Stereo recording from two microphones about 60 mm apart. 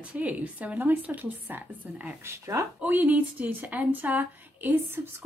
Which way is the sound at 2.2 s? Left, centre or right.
Right.